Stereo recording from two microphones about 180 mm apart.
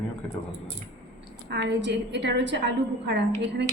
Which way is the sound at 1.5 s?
80° right.